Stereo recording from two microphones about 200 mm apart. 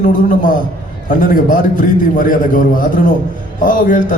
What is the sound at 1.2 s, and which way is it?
Speech, 40° left (ahead or behind).